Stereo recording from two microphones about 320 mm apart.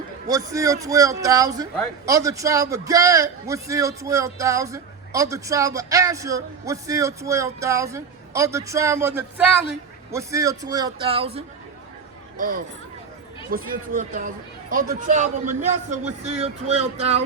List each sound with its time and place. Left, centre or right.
0.3 s a man's voice: centre